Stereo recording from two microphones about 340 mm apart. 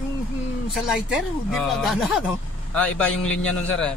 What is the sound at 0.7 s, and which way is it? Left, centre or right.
Speech, centre.